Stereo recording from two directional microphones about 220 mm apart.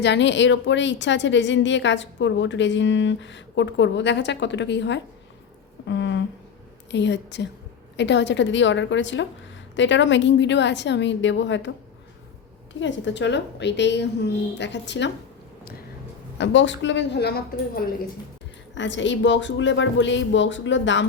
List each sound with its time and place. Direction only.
0.0 s a woman's voice: 55° left (ahead or behind)
12.8 s a woman's voice: 55° left (ahead or behind)
16.4 s a woman's voice: 55° left (ahead or behind)
18.7 s a woman's voice: 55° left (ahead or behind)